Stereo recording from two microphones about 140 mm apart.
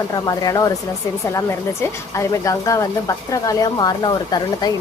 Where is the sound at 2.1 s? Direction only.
20° left (ahead or behind).